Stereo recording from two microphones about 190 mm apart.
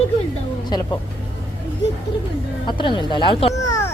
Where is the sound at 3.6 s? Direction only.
15° left (ahead or behind).